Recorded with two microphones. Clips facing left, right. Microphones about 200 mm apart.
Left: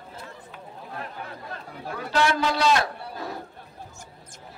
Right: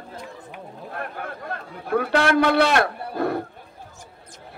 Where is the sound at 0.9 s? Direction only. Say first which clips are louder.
Right 4 dB; 60° right (ahead or behind).